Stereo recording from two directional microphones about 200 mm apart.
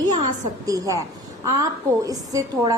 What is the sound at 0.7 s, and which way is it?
A woman's voice, 15° right (ahead or behind).